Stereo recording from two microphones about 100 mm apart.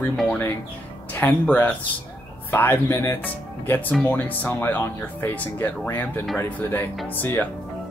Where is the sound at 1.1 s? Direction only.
20° left (ahead or behind).